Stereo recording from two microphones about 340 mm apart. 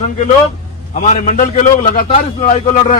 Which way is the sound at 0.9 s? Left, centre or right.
Left.